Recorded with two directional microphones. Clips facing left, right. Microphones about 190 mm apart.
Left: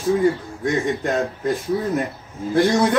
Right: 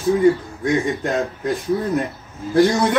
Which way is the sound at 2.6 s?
Centre (ahead or behind).